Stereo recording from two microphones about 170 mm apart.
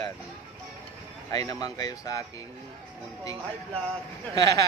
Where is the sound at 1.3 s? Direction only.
20° left (ahead or behind).